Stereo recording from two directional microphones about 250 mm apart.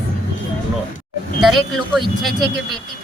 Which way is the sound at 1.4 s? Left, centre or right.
Centre.